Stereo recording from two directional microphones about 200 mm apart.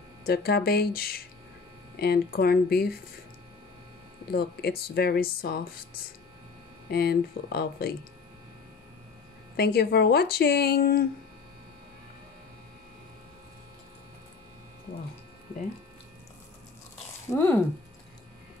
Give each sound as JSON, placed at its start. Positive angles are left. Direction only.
{"t": 0.2, "sound": "speech", "side_deg": 50}
{"t": 4.3, "sound": "speech", "side_deg": 50}
{"t": 6.9, "sound": "speech", "side_deg": 50}
{"t": 9.6, "sound": "speech", "side_deg": 50}